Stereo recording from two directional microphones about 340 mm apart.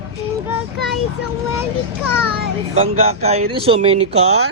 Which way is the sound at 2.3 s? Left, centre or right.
Right.